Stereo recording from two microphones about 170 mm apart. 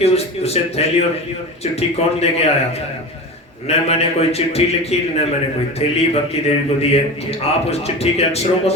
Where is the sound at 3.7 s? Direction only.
40° left (ahead or behind).